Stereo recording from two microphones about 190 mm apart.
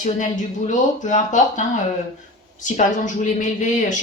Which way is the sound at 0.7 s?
40° left (ahead or behind).